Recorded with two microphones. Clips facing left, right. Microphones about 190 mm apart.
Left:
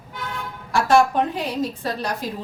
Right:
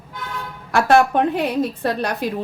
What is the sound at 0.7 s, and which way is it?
A woman's voice, 60° right (ahead or behind).